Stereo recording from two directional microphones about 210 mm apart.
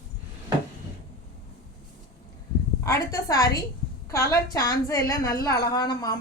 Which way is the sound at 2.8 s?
15° left (ahead or behind).